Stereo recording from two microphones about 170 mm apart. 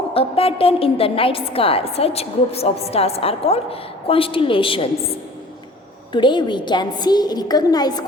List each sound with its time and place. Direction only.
0.1 s a woman's voice: 35° left (ahead or behind)
6.1 s a woman's voice: 30° left (ahead or behind)